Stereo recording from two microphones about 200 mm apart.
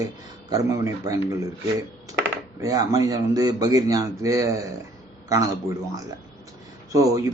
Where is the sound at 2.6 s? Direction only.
15° right (ahead or behind).